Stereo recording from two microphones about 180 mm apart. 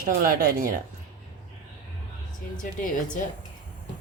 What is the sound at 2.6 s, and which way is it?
Speech, 50° left (ahead or behind).